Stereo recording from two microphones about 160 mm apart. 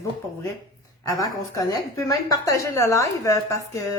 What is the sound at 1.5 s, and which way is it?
A woman's voice, 20° left (ahead or behind).